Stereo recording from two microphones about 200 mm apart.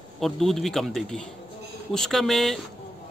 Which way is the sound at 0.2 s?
Centre (ahead or behind).